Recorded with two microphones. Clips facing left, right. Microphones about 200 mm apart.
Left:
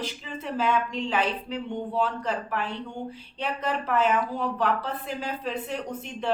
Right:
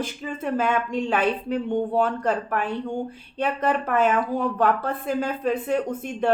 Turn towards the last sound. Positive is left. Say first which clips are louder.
# right 6 dB
turn(degrees=-50)  # may be behind; listen again after turning